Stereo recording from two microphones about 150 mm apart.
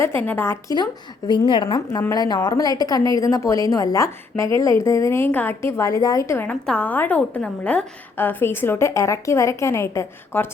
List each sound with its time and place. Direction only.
0.3 s a woman's voice: 15° left (ahead or behind)
1.3 s a woman's voice: 30° left (ahead or behind)